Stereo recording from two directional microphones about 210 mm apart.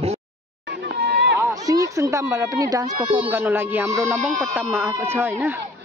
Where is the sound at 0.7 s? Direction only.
50° right (ahead or behind).